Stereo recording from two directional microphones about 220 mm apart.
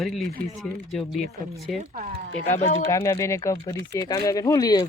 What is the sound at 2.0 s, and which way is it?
Speech, 40° right (ahead or behind).